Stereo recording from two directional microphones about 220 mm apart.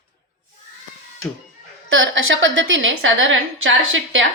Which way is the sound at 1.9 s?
60° right (ahead or behind).